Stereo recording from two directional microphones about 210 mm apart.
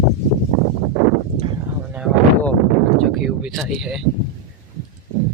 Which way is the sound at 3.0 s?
Centre (ahead or behind).